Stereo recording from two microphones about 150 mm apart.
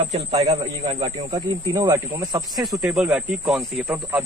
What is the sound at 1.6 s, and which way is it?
Speech, 20° right (ahead or behind).